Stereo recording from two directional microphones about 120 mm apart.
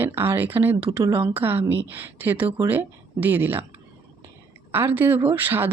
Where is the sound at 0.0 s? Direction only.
15° right (ahead or behind).